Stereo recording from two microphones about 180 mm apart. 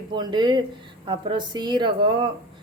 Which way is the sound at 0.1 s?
25° right (ahead or behind).